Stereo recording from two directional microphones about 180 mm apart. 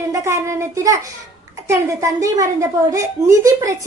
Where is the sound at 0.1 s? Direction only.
15° right (ahead or behind).